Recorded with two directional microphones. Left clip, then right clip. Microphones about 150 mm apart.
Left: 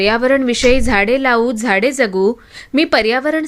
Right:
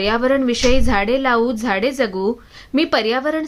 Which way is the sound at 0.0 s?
30° left (ahead or behind).